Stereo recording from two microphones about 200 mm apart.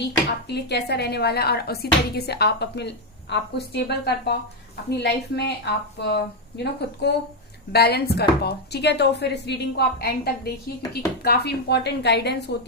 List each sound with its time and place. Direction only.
0.0 s speech: 55° left (ahead or behind)